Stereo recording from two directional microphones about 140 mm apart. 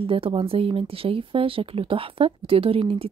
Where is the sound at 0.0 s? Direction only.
40° right (ahead or behind).